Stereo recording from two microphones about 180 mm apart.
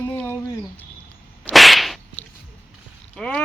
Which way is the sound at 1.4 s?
Centre (ahead or behind).